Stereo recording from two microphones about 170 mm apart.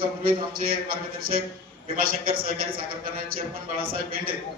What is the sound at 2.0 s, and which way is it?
Speech, 60° right (ahead or behind).